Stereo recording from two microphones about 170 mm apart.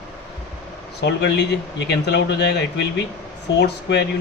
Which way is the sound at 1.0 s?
85° left.